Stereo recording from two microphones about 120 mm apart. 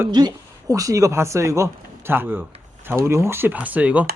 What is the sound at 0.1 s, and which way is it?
Speech, 35° right (ahead or behind).